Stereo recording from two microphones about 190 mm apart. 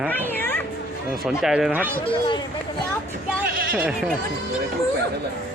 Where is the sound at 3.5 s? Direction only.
50° right (ahead or behind).